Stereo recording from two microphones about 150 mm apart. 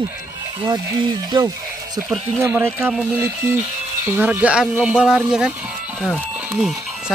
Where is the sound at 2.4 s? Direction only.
15° right (ahead or behind).